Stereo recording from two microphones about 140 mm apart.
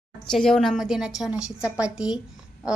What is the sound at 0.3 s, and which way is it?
A woman's voice, 5° left (ahead or behind).